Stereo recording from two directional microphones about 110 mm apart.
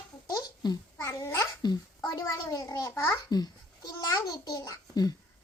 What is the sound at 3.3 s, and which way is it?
A child's voice, 35° left (ahead or behind).